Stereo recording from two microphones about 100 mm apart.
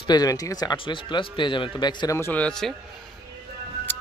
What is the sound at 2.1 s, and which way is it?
Speech, 25° left (ahead or behind).